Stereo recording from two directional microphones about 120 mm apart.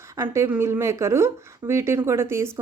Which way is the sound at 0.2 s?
20° right (ahead or behind).